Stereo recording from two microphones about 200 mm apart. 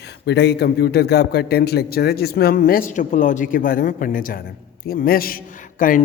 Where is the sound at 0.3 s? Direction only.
55° left (ahead or behind).